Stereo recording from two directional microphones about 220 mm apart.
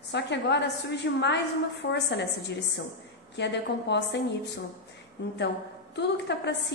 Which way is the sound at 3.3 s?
50° left (ahead or behind).